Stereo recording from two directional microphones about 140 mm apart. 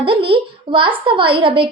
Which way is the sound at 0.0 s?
35° right (ahead or behind).